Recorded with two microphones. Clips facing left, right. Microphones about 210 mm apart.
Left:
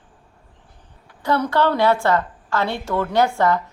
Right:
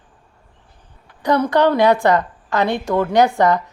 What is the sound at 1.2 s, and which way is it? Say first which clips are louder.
A woman's voice: right 4 dB; 15° right (ahead or behind).